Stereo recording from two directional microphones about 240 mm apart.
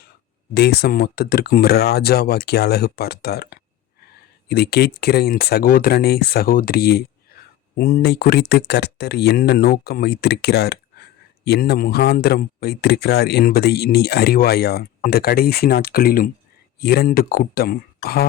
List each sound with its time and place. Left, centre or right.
0.5 s speech: left